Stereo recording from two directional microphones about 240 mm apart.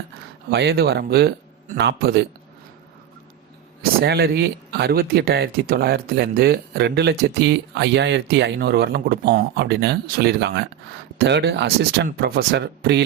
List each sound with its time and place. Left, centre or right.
0.5 s speech: right
4.0 s speech: right